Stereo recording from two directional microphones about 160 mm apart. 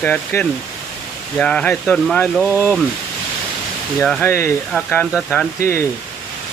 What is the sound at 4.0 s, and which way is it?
Speech, 5° left (ahead or behind).